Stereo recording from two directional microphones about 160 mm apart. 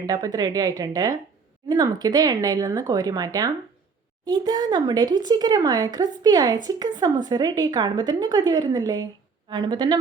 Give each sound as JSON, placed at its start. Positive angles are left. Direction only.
{"t": 0.0, "sound": "a woman's voice", "side_deg": -25}